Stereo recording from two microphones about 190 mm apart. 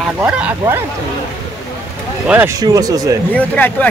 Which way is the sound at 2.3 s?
10° right (ahead or behind).